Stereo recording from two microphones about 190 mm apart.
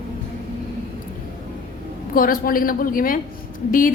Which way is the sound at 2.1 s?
50° left (ahead or behind).